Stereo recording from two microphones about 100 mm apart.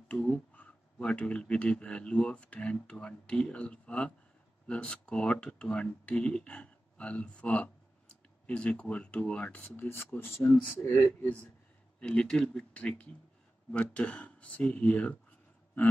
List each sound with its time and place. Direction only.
0.1 s speech: 15° left (ahead or behind)